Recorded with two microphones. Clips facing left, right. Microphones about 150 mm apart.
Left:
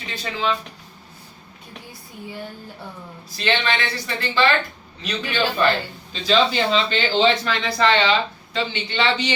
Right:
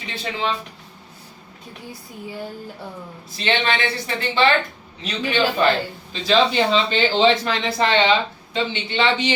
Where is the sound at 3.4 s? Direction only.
25° right (ahead or behind).